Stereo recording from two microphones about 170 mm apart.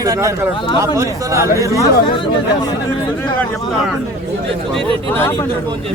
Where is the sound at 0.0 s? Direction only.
20° right (ahead or behind).